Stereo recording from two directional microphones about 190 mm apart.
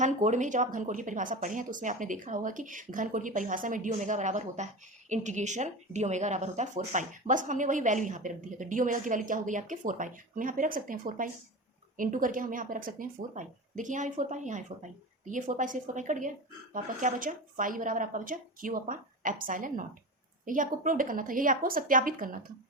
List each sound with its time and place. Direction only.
0.0 s a woman's voice: 40° right (ahead or behind)